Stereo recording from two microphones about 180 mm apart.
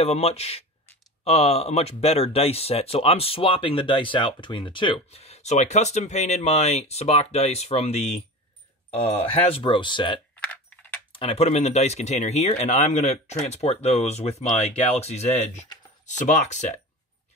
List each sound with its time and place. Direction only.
0.0 s speech: 35° left (ahead or behind)
9.3 s speech: 30° left (ahead or behind)
10.4 s typing: 10° left (ahead or behind)
11.1 s speech: 30° left (ahead or behind)